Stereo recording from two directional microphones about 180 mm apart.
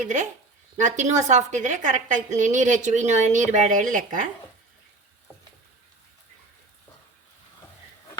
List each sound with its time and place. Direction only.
0.0 s a woman's voice: 40° right (ahead or behind)